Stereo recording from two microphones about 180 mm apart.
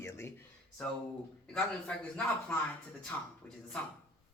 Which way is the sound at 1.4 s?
5° left (ahead or behind).